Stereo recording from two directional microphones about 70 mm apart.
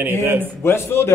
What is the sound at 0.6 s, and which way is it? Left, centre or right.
Speech, left.